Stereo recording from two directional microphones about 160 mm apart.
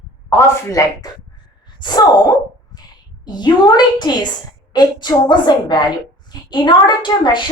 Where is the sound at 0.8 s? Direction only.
20° left (ahead or behind).